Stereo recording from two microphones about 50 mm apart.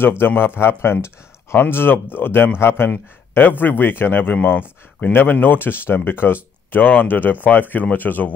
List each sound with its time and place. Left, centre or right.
0.4 s speech: left